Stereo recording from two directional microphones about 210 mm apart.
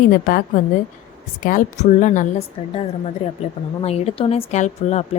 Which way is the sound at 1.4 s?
40° left (ahead or behind).